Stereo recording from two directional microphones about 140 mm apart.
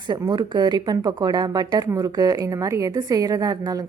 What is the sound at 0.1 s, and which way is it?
A woman's voice, 30° right (ahead or behind).